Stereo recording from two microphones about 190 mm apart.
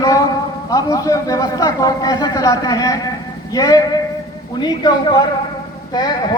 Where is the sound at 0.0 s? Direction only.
20° left (ahead or behind).